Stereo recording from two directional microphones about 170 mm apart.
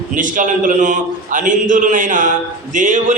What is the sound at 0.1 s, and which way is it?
A man's voice, 50° right (ahead or behind).